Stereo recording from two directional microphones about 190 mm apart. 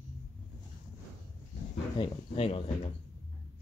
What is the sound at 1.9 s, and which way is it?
Speech, 30° left (ahead or behind).